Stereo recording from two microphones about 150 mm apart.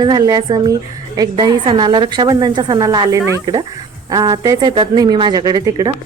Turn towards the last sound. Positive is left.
turn(degrees=-25)  # may be behind; listen again after turning